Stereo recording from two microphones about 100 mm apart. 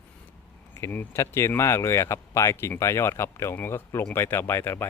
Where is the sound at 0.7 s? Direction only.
25° left (ahead or behind).